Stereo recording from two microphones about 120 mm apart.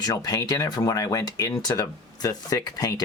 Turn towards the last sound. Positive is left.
turn(degrees=30)  # may be behind; listen again after turning